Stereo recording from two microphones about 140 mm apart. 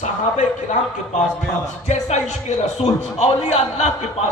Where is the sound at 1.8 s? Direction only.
55° left (ahead or behind).